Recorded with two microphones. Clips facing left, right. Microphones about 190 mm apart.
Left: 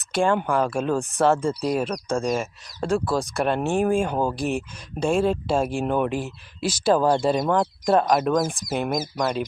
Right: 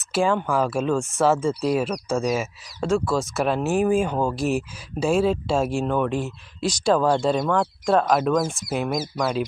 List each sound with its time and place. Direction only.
0.1 s speech: 5° right (ahead or behind)
7.4 s speech: 15° left (ahead or behind)
7.9 s speech: centre (ahead or behind)